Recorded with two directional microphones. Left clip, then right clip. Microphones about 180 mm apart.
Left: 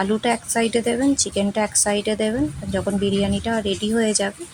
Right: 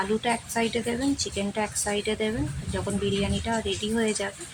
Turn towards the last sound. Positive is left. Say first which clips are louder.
# left 6 dB
turn(degrees=30)  # may be behind; listen again after turning